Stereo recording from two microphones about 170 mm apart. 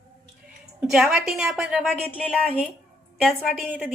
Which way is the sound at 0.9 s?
5° right (ahead or behind).